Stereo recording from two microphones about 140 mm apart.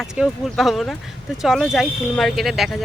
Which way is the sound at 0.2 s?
Centre (ahead or behind).